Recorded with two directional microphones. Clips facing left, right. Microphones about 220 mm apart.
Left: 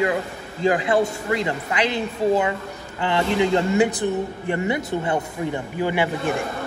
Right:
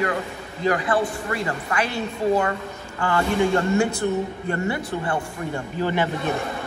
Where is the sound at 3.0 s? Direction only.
20° left (ahead or behind).